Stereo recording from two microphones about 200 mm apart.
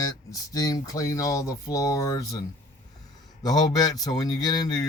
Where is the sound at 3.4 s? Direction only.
20° left (ahead or behind).